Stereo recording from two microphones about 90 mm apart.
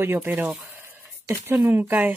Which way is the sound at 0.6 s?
30° right (ahead or behind).